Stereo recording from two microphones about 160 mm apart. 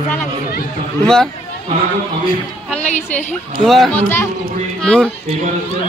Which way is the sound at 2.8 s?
45° left (ahead or behind).